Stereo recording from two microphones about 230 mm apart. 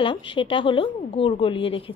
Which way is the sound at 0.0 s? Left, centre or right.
Left.